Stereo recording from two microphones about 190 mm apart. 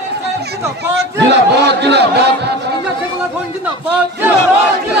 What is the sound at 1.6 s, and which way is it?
Speech, 60° right (ahead or behind).